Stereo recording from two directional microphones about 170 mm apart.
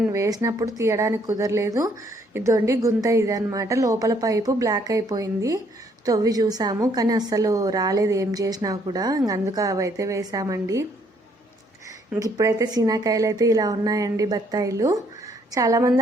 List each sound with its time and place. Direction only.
0.0 s a woman's voice: 20° right (ahead or behind)
12.2 s a woman's voice: 20° right (ahead or behind)